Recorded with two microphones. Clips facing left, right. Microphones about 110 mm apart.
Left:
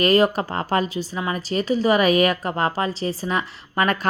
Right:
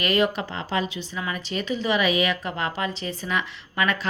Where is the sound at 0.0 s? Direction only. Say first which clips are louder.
Left 5 dB; 40° left (ahead or behind).